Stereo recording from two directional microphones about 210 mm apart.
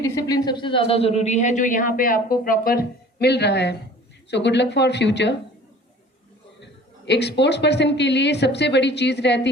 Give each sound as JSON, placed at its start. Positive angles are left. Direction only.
{"t": 0.0, "sound": "a man's voice", "side_deg": 15}
{"t": 6.6, "sound": "a woman's voice", "side_deg": 55}